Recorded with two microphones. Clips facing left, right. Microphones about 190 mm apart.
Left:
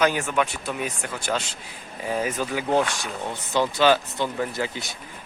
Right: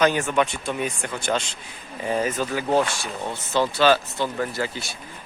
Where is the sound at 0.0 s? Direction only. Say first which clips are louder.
Right 2 dB; 10° left (ahead or behind).